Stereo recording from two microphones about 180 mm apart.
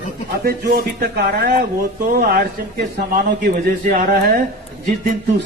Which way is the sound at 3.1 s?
50° right (ahead or behind).